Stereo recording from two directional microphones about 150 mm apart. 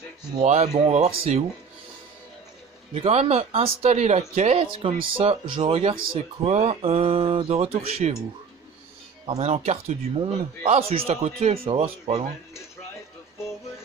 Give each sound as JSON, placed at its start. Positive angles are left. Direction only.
{"t": 0.4, "sound": "speech", "side_deg": -45}
{"t": 2.9, "sound": "speech", "side_deg": -40}
{"t": 9.2, "sound": "speech", "side_deg": -45}